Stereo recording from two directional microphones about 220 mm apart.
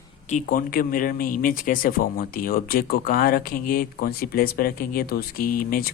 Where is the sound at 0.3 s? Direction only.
35° left (ahead or behind).